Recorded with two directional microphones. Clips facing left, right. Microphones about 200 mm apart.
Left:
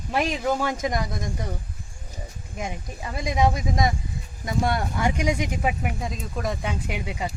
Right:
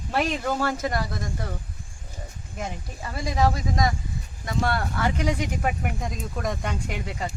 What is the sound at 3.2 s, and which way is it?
Speech, 20° left (ahead or behind).